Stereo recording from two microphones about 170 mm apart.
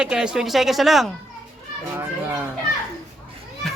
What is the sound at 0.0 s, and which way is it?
A man's voice, 5° right (ahead or behind).